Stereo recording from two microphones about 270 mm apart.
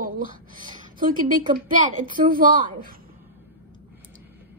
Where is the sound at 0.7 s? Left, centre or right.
Right.